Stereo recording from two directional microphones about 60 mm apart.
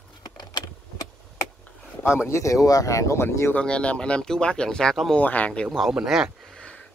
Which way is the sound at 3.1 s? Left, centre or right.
Left.